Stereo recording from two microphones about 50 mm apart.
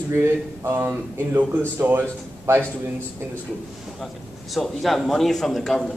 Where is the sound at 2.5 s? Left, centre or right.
Right.